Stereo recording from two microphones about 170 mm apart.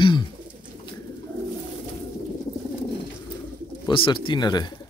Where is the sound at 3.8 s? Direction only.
30° left (ahead or behind).